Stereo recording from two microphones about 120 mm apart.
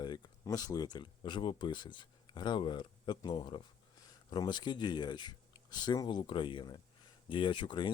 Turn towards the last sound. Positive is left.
turn(degrees=40)  # may be behind; listen again after turning